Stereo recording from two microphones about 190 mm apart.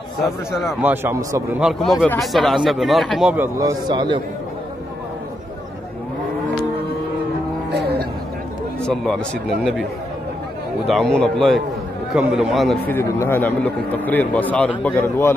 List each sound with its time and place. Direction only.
0.2 s speech: centre (ahead or behind)
1.0 s a man's voice: 15° right (ahead or behind)
1.6 s speech: centre (ahead or behind)
3.5 s a man's voice: 20° right (ahead or behind)
7.7 s a sound: 60° right (ahead or behind)
8.8 s speech: 5° left (ahead or behind)
10.9 s speech: centre (ahead or behind)
12.9 s a man's voice: 10° left (ahead or behind)